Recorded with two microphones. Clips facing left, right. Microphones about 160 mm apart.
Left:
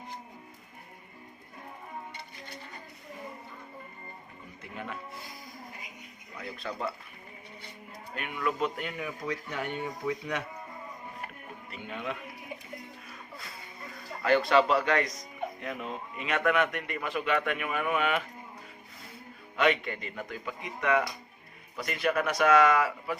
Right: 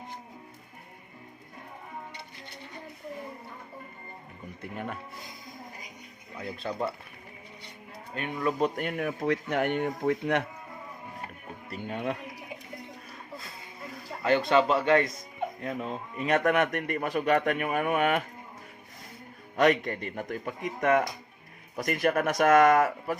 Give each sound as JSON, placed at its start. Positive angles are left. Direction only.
{"t": 4.6, "sound": "speech", "side_deg": -50}
{"t": 6.6, "sound": "speech", "side_deg": -30}
{"t": 8.1, "sound": "speech", "side_deg": -35}
{"t": 8.8, "sound": "speech", "side_deg": -55}
{"t": 11.7, "sound": "speech", "side_deg": -40}
{"t": 14.2, "sound": "speech", "side_deg": -25}
{"t": 19.5, "sound": "speech", "side_deg": -40}